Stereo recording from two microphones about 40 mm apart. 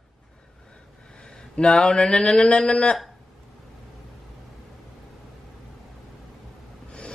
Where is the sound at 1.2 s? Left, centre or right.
Left.